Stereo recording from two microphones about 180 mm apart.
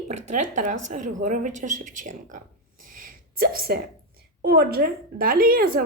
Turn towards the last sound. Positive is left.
turn(degrees=-55)  # may be behind; listen again after turning